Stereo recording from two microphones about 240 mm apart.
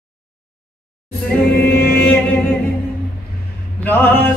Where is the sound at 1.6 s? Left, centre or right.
Left.